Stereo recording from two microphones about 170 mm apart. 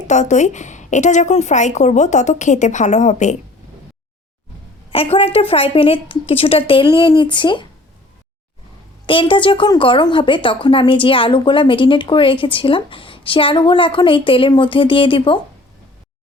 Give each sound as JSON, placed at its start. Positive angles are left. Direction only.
{"t": 0.1, "sound": "a woman's voice", "side_deg": 45}
{"t": 4.9, "sound": "a woman's voice", "side_deg": 35}
{"t": 9.0, "sound": "a woman's voice", "side_deg": 30}